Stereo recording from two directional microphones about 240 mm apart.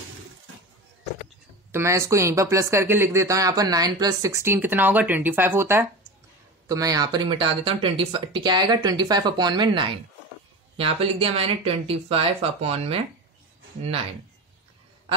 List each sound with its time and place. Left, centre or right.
1.7 s speech: centre